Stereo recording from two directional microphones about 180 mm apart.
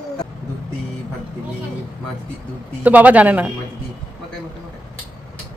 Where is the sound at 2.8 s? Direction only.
10° right (ahead or behind).